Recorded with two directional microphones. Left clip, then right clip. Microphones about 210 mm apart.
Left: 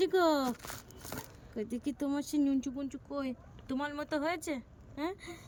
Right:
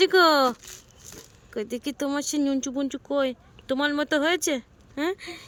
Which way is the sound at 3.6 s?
35° right (ahead or behind).